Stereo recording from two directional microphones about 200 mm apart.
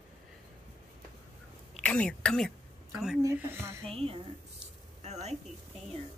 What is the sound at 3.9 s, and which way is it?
Speech, 30° right (ahead or behind).